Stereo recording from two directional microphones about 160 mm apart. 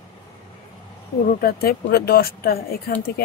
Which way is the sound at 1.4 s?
70° left (ahead or behind).